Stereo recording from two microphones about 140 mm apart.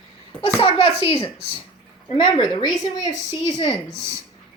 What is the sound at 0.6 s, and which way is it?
Speech, 35° left (ahead or behind).